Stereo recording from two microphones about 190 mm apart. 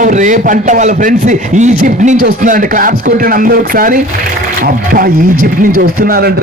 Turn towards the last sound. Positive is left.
turn(degrees=-55)  # may be behind; listen again after turning